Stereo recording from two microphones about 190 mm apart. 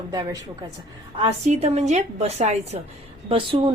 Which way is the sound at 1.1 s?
30° right (ahead or behind).